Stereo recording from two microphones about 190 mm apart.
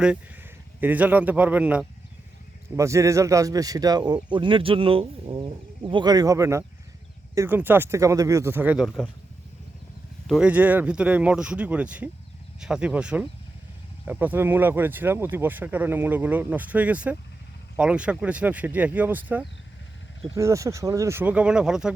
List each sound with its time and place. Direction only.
0.8 s speech: 10° right (ahead or behind)
10.2 s speech: 5° right (ahead or behind)